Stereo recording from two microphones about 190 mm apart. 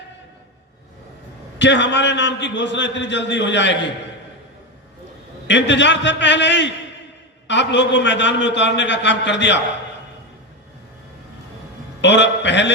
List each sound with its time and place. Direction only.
1.5 s a man's voice: 70° left (ahead or behind)
5.5 s a man's voice: 70° left (ahead or behind)
12.0 s a man's voice: 70° left (ahead or behind)